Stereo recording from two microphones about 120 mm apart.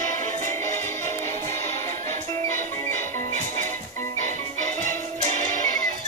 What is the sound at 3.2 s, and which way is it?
Music, 90° right.